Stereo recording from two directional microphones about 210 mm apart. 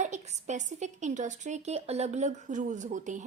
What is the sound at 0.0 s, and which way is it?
A woman's voice, 35° right (ahead or behind).